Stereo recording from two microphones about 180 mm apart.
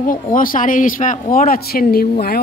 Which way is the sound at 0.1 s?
50° left (ahead or behind).